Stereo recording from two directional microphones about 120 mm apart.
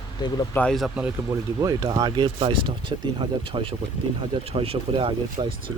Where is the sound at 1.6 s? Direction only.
35° right (ahead or behind).